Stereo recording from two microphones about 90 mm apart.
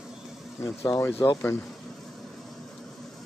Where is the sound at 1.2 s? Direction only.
45° left (ahead or behind).